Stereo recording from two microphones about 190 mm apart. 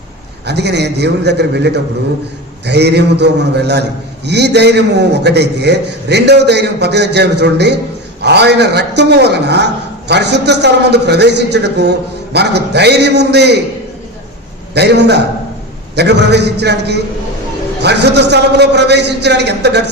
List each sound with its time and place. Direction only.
0.4 s a man's voice: 60° right (ahead or behind)
14.7 s a man's voice: 60° right (ahead or behind)